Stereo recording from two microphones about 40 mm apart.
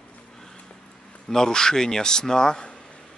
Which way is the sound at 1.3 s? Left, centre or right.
Centre.